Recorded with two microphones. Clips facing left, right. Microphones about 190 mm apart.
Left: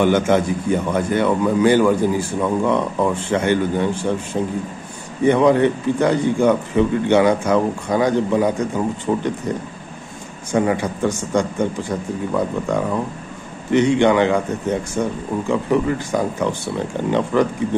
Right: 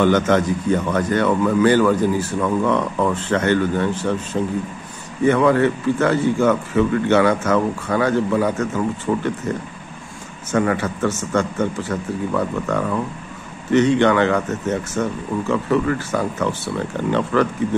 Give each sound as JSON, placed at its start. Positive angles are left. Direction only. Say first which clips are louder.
{"t": 0.0, "sound": "a man's voice", "louder": "even", "side_deg": 10}